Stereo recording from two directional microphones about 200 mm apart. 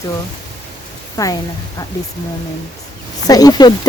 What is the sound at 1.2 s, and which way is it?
Speech, 15° left (ahead or behind).